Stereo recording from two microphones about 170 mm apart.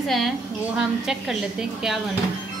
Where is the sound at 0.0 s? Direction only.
Centre (ahead or behind).